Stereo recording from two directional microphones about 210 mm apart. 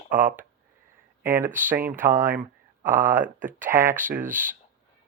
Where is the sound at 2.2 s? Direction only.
10° right (ahead or behind).